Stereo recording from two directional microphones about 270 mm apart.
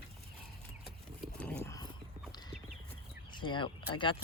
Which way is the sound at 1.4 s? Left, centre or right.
Centre.